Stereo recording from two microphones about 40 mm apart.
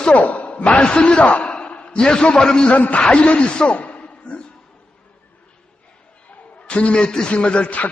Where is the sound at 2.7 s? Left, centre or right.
Left.